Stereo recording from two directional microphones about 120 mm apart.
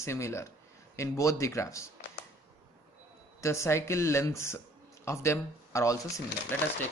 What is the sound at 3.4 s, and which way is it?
Speech, 25° left (ahead or behind).